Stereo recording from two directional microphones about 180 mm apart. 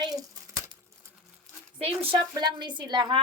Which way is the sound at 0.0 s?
20° right (ahead or behind).